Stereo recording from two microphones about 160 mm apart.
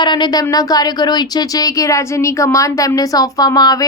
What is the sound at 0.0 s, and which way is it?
A woman's voice, 30° left (ahead or behind).